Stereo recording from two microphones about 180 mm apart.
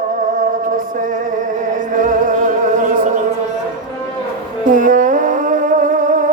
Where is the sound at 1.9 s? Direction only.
45° right (ahead or behind).